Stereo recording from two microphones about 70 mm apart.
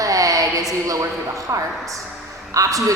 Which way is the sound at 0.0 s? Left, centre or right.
Right.